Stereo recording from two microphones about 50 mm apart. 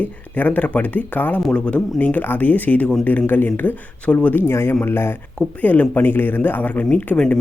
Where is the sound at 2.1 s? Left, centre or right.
Left.